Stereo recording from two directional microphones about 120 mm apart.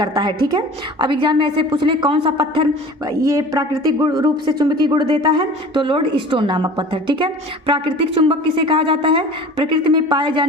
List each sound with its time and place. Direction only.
0.0 s a woman's voice: 35° right (ahead or behind)